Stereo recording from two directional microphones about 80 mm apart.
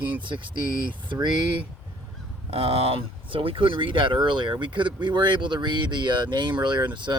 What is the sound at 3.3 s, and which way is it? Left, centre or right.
Speech, right.